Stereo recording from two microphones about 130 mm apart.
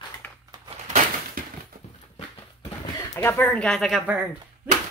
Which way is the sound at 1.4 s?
90° right.